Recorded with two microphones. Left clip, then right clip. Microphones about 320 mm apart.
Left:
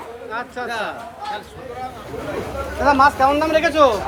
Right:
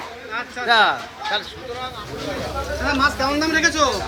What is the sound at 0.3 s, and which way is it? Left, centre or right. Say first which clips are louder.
Speech: right 8 dB; centre.